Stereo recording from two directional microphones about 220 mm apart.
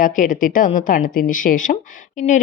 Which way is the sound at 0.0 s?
35° left (ahead or behind).